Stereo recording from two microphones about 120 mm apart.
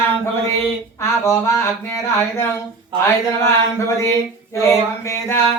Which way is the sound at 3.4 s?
25° left (ahead or behind).